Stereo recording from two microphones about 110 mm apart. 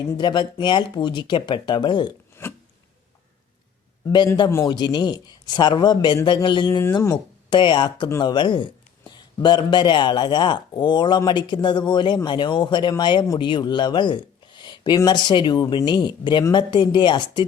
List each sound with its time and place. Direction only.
0.2 s speech: 45° left (ahead or behind)
2.4 s filing: 25° left (ahead or behind)
4.6 s a man's voice: 40° left (ahead or behind)